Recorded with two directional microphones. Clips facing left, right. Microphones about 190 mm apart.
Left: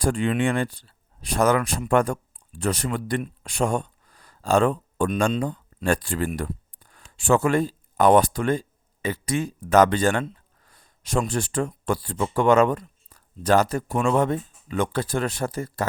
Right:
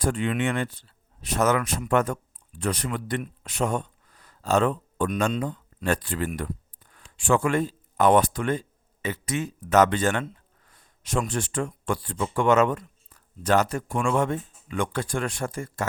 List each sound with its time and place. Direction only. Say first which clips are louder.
0.0 s speech: left 3 dB; 35° left (ahead or behind)
5.0 s speech: left 3 dB; 30° left (ahead or behind)
11.3 s speech: left 3 dB; 40° left (ahead or behind)
13.9 s speech: left 3 dB; 25° left (ahead or behind)
14.2 s speech: left 3 dB; 35° left (ahead or behind)